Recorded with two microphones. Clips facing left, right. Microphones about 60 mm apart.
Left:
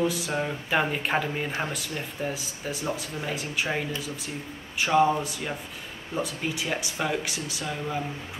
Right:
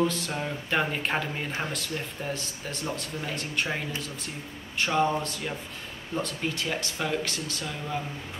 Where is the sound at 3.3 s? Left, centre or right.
Centre.